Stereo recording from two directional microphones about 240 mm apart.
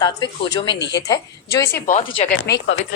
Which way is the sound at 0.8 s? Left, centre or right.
Left.